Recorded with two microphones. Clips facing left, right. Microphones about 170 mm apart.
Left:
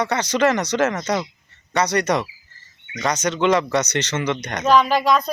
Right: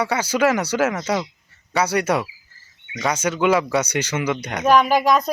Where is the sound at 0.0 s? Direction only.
10° right (ahead or behind).